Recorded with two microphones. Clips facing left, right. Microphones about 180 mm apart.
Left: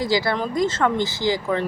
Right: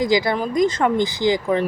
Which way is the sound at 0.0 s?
15° right (ahead or behind).